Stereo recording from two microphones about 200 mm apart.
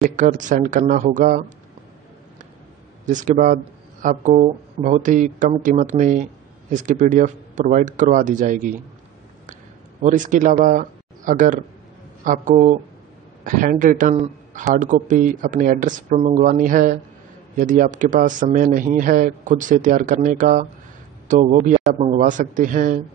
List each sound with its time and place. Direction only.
0.0 s speech: 40° right (ahead or behind)
3.1 s speech: 40° right (ahead or behind)
10.0 s a man's voice: 40° right (ahead or behind)